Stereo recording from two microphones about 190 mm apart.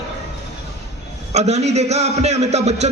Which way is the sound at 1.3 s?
35° right (ahead or behind).